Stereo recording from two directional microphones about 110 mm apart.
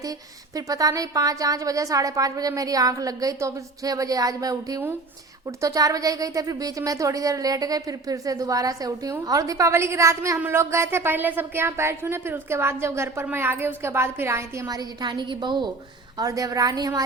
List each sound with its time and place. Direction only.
0.5 s a woman's voice: 35° right (ahead or behind)
14.8 s a woman's voice: 40° right (ahead or behind)
16.1 s a woman's voice: 35° right (ahead or behind)